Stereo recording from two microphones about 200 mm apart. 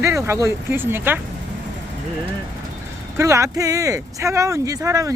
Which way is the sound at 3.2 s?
15° right (ahead or behind).